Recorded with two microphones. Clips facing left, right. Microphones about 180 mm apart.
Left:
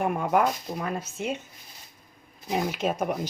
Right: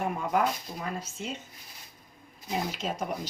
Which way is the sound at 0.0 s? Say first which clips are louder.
Left 4 dB; 55° left (ahead or behind).